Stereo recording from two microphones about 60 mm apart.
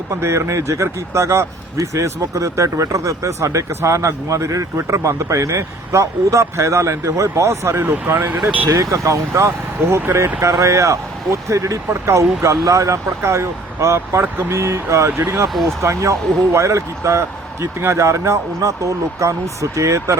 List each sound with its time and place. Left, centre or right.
0.2 s speech: right
3.7 s speech: right
3.9 s speech: right
8.7 s speech: right